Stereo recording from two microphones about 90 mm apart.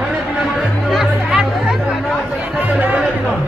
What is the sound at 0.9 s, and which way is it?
Music, 5° right (ahead or behind).